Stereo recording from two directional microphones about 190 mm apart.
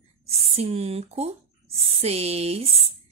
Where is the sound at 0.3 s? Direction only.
35° right (ahead or behind).